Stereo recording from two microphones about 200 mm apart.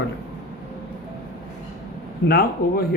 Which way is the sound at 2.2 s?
50° left (ahead or behind).